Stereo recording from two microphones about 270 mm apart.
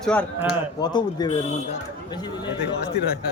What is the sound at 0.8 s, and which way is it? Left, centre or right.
A man's voice, centre.